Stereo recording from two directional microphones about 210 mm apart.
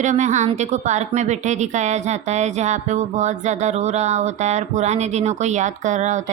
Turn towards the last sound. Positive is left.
turn(degrees=-35)  # may be behind; listen again after turning